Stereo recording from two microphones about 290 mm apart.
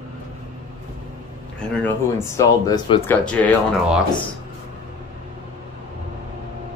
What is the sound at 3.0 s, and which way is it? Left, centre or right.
Speech, centre.